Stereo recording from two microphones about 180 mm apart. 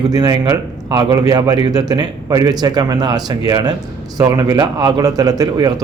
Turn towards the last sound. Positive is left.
turn(degrees=-20)  # may be behind; listen again after turning